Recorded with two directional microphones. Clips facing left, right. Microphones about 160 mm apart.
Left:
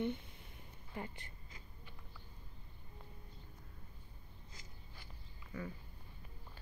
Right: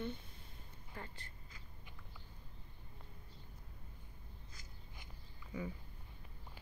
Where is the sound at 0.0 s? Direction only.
20° left (ahead or behind).